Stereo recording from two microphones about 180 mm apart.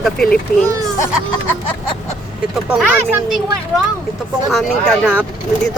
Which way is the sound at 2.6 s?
10° right (ahead or behind).